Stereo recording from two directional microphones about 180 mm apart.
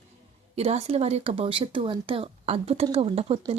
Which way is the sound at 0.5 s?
35° right (ahead or behind).